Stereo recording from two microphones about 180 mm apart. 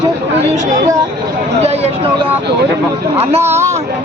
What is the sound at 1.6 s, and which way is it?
Speech, 35° right (ahead or behind).